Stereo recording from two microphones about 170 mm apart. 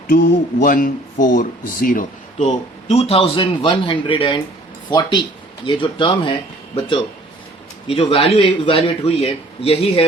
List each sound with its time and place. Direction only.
0.1 s speech: 55° left (ahead or behind)
2.9 s a man's voice: 35° left (ahead or behind)